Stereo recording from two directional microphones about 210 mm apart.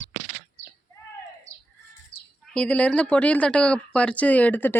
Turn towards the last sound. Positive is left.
turn(degrees=10)  # may be behind; listen again after turning